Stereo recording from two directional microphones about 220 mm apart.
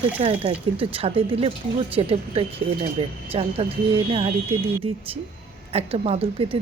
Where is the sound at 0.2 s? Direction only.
25° right (ahead or behind).